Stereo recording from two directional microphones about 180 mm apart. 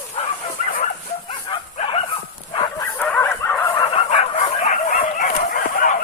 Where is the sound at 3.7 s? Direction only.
25° left (ahead or behind); by 6.0 s 50° left (ahead or behind).